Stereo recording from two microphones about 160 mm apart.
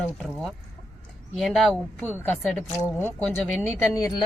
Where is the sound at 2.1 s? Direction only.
10° left (ahead or behind).